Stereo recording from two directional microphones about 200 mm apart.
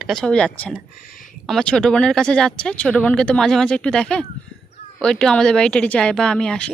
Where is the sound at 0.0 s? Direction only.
5° left (ahead or behind).